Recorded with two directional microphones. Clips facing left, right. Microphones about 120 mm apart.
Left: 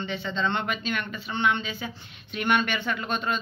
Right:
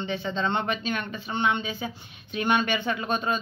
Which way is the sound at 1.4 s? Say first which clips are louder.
Even; 20° right (ahead or behind).